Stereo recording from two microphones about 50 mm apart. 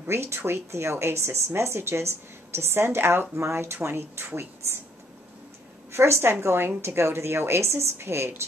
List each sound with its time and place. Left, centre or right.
0.1 s a woman's voice: right
5.9 s a woman's voice: right